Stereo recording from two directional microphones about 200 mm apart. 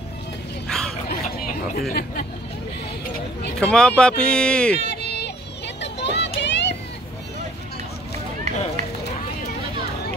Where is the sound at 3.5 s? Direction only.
5° left (ahead or behind).